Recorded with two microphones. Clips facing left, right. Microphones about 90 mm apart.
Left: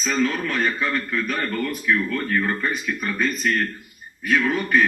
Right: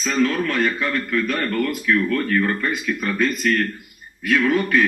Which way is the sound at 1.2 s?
Centre (ahead or behind).